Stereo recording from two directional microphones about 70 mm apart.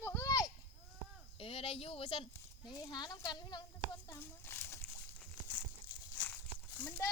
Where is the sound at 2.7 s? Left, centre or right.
Left.